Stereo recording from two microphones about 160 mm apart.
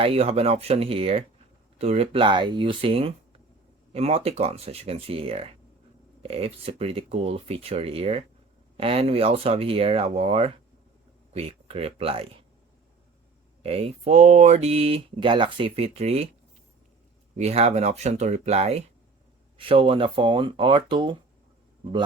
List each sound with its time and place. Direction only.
0.0 s speech: 40° right (ahead or behind)
13.6 s speech: 40° right (ahead or behind)
17.3 s speech: 40° right (ahead or behind)